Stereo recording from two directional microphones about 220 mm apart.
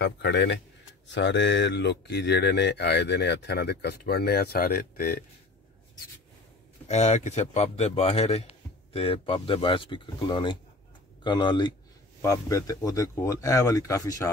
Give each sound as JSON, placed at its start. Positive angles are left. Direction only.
{"t": 0.0, "sound": "speech", "side_deg": 50}
{"t": 6.9, "sound": "speech", "side_deg": 30}